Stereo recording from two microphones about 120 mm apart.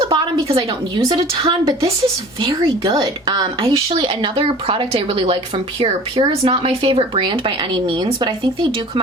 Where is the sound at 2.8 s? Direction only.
35° right (ahead or behind).